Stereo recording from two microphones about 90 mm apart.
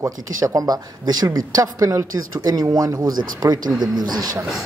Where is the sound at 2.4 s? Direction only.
45° right (ahead or behind).